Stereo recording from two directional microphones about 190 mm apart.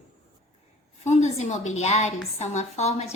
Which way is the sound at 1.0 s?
35° left (ahead or behind).